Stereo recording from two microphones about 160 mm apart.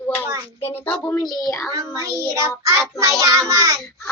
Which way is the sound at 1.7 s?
20° right (ahead or behind).